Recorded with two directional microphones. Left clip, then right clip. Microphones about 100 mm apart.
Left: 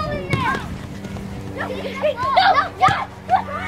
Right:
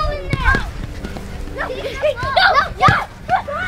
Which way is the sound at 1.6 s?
45° right (ahead or behind).